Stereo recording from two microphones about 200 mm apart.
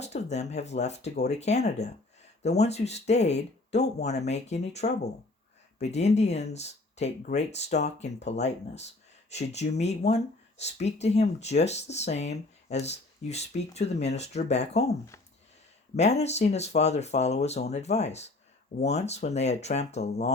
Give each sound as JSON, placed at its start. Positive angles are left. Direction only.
{"t": 0.0, "sound": "speech", "side_deg": 35}
{"t": 16.0, "sound": "speech", "side_deg": 35}